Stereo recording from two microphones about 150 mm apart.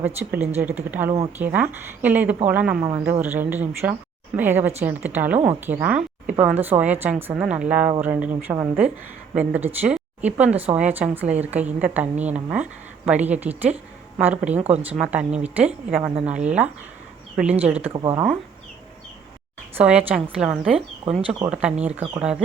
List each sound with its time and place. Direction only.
0.0 s a woman's voice: 15° right (ahead or behind)
14.6 s speech: 40° right (ahead or behind)
14.8 s a woman's voice: 10° right (ahead or behind)
17.9 s speech: 30° right (ahead or behind)
19.7 s a woman's voice: 10° right (ahead or behind)